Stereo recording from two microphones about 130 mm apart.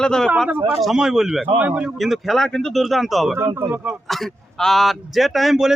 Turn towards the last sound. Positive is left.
turn(degrees=0)  # may be behind; listen again after turning